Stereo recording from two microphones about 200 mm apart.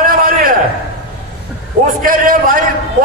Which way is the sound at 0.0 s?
45° right (ahead or behind).